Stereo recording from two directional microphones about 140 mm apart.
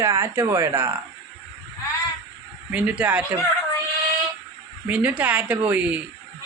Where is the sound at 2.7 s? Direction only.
10° right (ahead or behind).